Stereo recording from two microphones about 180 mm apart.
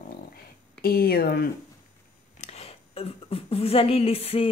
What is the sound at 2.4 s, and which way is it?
Speech, 35° left (ahead or behind).